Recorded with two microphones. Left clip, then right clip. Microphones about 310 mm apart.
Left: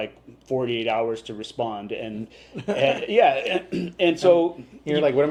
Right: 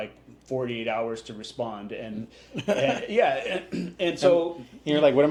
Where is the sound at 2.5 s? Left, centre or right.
Right.